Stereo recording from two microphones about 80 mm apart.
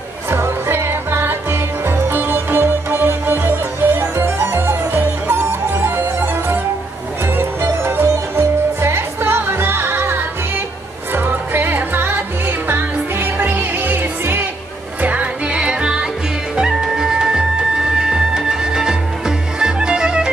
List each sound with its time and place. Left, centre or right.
0.3 s music: right; by 20.2 s centre